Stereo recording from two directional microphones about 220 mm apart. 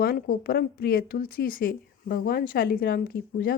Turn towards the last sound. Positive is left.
turn(degrees=40)  # may be behind; listen again after turning